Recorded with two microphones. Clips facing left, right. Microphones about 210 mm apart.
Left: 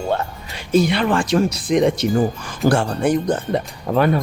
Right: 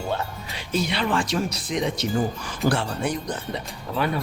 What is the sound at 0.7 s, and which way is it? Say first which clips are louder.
Speech: left 8 dB; 55° left (ahead or behind).